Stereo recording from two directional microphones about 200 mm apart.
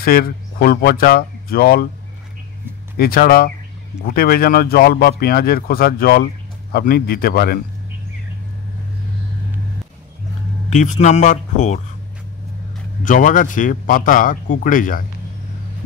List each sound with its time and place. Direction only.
0.0 s speech: 50° left (ahead or behind)
3.0 s speech: 45° left (ahead or behind)
10.7 s a man's voice: 35° left (ahead or behind)
13.0 s a man's voice: 40° left (ahead or behind)